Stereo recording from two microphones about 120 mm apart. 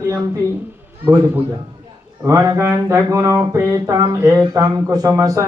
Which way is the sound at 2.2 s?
25° right (ahead or behind).